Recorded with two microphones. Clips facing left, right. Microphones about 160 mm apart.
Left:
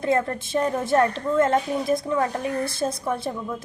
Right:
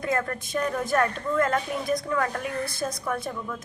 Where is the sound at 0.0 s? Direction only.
30° left (ahead or behind).